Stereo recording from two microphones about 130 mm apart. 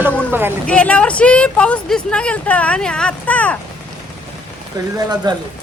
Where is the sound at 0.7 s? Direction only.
10° left (ahead or behind).